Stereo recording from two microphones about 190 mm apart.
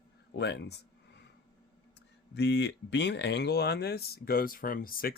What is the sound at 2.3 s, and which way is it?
Speech, 65° left (ahead or behind).